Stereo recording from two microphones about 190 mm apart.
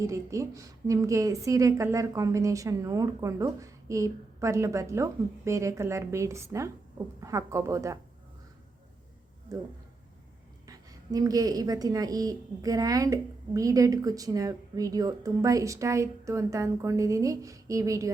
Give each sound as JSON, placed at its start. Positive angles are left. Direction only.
{"t": 0.0, "sound": "a woman's voice", "side_deg": -15}
{"t": 9.5, "sound": "a woman's voice", "side_deg": -20}
{"t": 10.7, "sound": "a woman's voice", "side_deg": -20}